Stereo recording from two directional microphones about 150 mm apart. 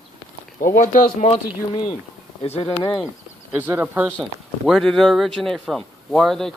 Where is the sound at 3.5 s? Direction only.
10° right (ahead or behind).